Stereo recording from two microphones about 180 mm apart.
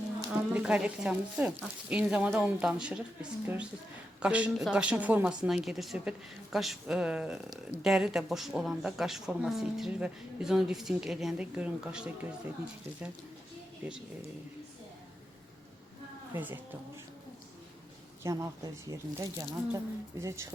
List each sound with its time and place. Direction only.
0.3 s a woman's voice: 5° right (ahead or behind)
16.3 s speech: 10° right (ahead or behind)
18.2 s speech: 15° right (ahead or behind)